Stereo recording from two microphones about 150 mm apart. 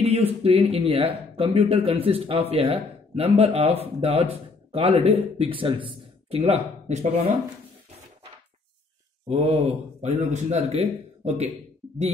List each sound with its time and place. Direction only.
0.0 s speech: 45° right (ahead or behind)
9.3 s speech: 40° right (ahead or behind)